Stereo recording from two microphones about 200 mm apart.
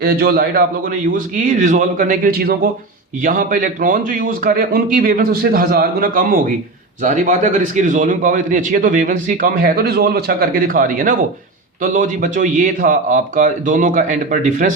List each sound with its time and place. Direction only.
0.0 s a man's voice: 45° right (ahead or behind)